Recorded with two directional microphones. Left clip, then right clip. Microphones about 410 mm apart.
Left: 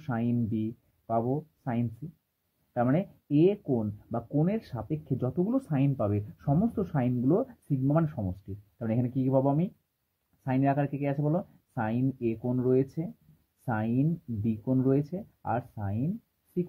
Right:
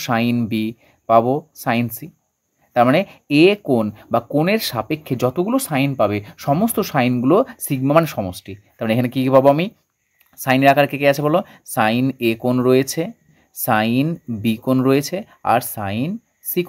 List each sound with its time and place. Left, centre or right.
0.0 s speech: centre